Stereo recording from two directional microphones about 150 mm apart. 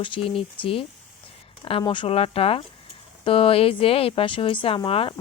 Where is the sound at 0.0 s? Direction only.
35° left (ahead or behind).